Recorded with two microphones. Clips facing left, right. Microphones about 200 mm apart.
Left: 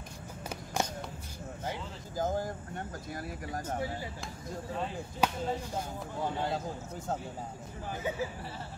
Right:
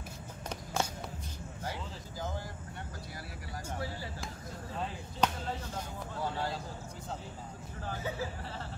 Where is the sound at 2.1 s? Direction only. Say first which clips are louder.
Left 9 dB; 45° left (ahead or behind).